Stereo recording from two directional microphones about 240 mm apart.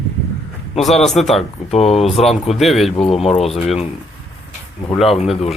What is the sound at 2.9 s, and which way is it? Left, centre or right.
Speech, left.